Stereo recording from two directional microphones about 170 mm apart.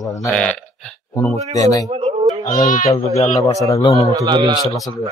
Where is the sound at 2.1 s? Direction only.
40° right (ahead or behind).